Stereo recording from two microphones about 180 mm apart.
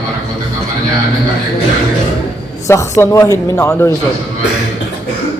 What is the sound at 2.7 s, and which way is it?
Speech, 15° left (ahead or behind).